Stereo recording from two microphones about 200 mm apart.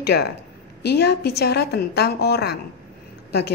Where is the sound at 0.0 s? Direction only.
55° left (ahead or behind).